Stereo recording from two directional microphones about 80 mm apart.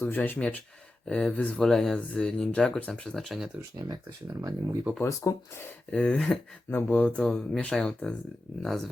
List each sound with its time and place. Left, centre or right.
0.0 s speech: left
3.2 s speech: centre
3.8 s speech: right
4.3 s speech: right
5.2 s speech: left
5.9 s speech: centre
6.7 s speech: centre
7.2 s speech: centre